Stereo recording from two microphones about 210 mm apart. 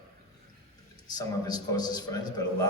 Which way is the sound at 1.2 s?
20° left (ahead or behind).